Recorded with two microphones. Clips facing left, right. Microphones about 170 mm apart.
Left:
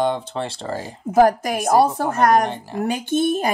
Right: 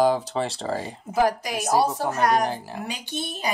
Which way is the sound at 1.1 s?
50° left (ahead or behind).